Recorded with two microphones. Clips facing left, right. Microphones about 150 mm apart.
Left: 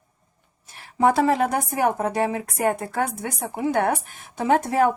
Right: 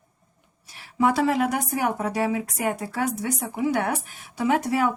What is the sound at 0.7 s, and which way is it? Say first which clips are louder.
Speech: left 2 dB; 45° left (ahead or behind).